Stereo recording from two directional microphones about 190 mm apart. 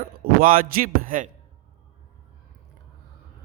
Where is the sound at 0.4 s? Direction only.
50° right (ahead or behind).